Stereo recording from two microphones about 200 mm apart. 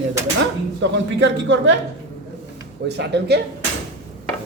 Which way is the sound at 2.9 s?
55° right (ahead or behind).